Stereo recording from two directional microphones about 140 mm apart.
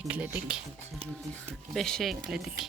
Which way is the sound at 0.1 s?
10° right (ahead or behind).